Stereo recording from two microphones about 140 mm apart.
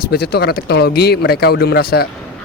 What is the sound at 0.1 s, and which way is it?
A man's voice, 90° left.